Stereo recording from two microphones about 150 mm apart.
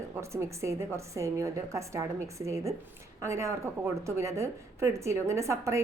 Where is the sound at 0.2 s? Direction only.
20° right (ahead or behind).